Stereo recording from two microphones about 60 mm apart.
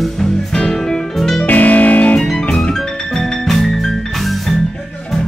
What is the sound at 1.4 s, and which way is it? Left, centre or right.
Music, left.